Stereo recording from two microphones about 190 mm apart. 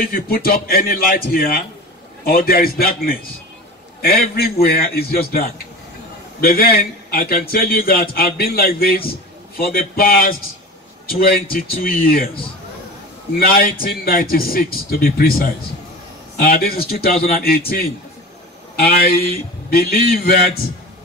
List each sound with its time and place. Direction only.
0.0 s a man's voice: 50° left (ahead or behind)
13.3 s a man's voice: 50° left (ahead or behind)